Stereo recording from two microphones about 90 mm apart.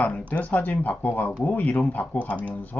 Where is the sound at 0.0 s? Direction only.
15° left (ahead or behind).